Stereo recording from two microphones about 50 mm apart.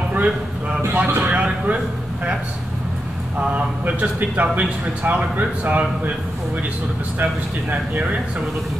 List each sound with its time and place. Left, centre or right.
0.9 s speech: right
3.3 s speech: right